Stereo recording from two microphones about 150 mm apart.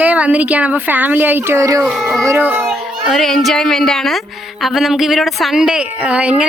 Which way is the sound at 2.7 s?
Centre (ahead or behind).